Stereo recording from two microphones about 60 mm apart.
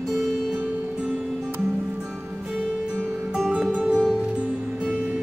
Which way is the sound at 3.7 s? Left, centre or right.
Centre.